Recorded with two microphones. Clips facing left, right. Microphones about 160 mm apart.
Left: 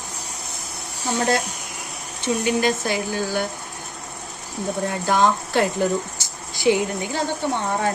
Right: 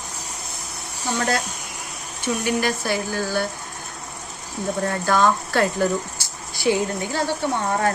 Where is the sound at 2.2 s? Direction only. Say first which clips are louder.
Left 2 dB; 20° left (ahead or behind).